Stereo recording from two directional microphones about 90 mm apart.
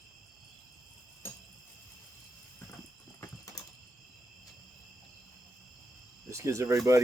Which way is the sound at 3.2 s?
40° left (ahead or behind).